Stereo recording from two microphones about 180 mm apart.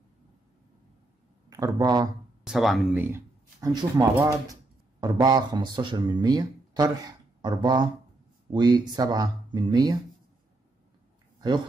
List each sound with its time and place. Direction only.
1.5 s speech: 20° right (ahead or behind)
2.4 s speech: centre (ahead or behind); by 9.9 s 25° right (ahead or behind)